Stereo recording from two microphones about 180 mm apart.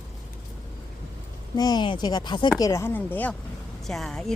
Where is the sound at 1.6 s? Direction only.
25° left (ahead or behind).